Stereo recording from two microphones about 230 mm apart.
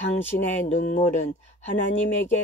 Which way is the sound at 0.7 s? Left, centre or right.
Left.